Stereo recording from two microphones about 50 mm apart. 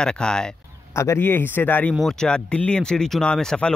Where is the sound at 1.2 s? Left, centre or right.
Left.